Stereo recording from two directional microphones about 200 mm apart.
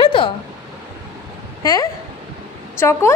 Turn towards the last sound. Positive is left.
turn(degrees=15)  # may be behind; listen again after turning